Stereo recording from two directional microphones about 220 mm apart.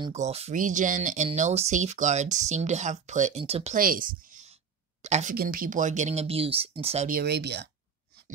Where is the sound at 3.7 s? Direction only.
40° right (ahead or behind).